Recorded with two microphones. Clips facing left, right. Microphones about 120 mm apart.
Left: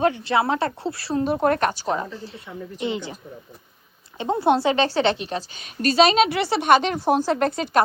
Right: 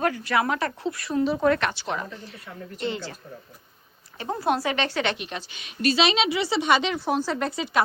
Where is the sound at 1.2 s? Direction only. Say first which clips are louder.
Left 2 dB; 50° left (ahead or behind); by 2.1 s 35° left (ahead or behind).